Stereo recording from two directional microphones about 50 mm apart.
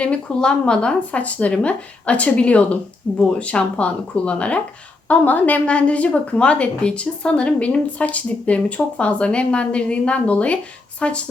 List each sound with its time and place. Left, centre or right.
0.0 s a woman's voice: left